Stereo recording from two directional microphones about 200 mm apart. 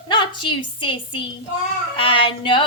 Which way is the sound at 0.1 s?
25° left (ahead or behind).